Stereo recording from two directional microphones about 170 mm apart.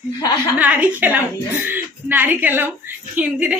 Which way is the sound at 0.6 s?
10° right (ahead or behind).